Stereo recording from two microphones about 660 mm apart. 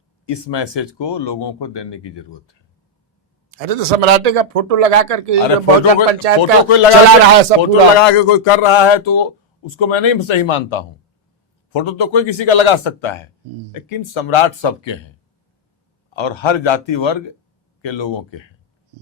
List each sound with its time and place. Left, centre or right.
0.3 s speech: left
3.5 s speech: right
6.4 s a man's voice: left